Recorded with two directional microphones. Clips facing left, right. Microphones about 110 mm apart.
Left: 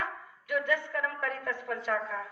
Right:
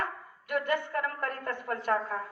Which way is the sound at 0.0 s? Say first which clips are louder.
Right 2 dB; 55° right (ahead or behind).